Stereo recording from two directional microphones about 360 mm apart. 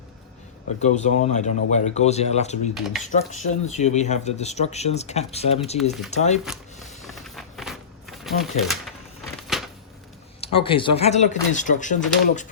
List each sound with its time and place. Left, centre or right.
0.8 s speech: centre
2.7 s speech: centre
3.0 s speech: centre
6.4 s a sound: centre
7.0 s shuffling cards: centre
9.2 s a sound: centre
10.4 s speech: centre